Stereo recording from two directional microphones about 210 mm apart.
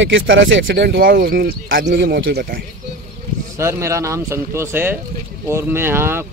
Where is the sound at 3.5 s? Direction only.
15° right (ahead or behind).